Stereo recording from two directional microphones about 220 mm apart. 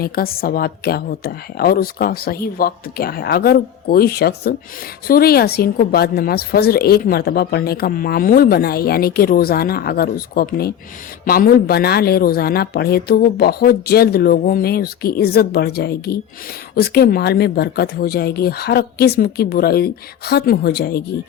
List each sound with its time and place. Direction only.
0.0 s speech: 45° left (ahead or behind)